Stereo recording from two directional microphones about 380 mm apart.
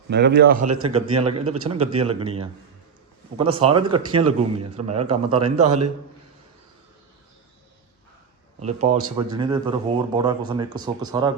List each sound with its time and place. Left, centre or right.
0.1 s a man's voice: right
5.6 s a man's voice: right
8.6 s a man's voice: centre